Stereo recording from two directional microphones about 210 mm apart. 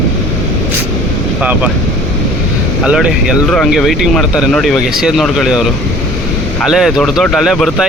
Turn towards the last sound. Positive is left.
turn(degrees=0)  # may be behind; listen again after turning